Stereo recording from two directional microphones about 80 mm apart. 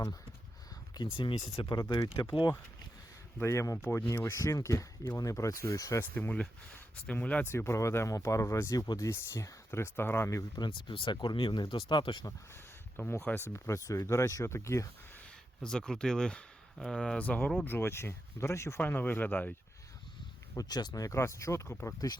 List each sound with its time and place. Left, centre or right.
1.1 s speech: left
2.2 s speech: left
3.4 s speech: left
6.0 s speech: left
6.3 s speech: centre
7.5 s speech: left
10.6 s speech: left
13.2 s speech: left
15.6 s speech: centre
17.7 s speech: left
18.8 s speech: left
20.6 s speech: left